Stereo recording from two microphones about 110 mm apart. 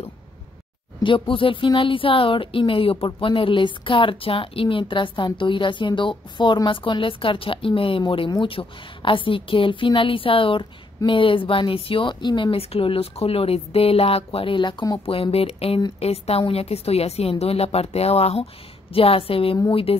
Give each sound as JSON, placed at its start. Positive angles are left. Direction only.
{"t": 1.0, "sound": "speech", "side_deg": 50}
{"t": 15.3, "sound": "a woman's voice", "side_deg": 65}